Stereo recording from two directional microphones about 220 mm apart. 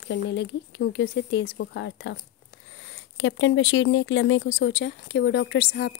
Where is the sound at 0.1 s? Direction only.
55° left (ahead or behind).